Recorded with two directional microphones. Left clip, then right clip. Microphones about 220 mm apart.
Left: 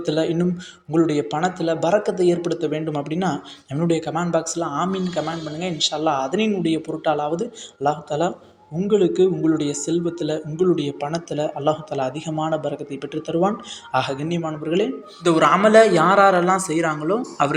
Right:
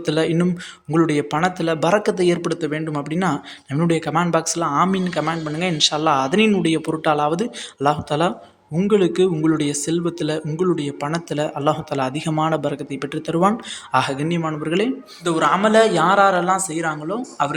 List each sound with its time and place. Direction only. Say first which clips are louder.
0.0 s speech: right 1 dB; 20° right (ahead or behind)
15.2 s speech: left 2 dB; 5° left (ahead or behind)